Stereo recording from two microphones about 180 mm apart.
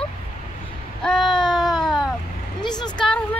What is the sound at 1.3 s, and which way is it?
Baby cry, centre (ahead or behind).